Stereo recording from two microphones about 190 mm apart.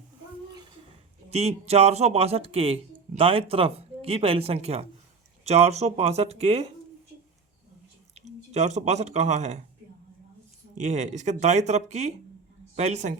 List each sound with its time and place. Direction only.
1.3 s speech: 35° right (ahead or behind)
8.1 s speech: 35° right (ahead or behind)
10.8 s speech: 40° right (ahead or behind)